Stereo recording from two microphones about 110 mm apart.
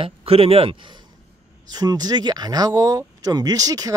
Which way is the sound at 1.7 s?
35° right (ahead or behind).